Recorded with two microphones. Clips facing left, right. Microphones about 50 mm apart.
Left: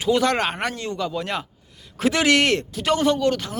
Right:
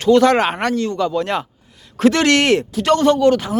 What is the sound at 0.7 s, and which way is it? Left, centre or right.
Speech, centre.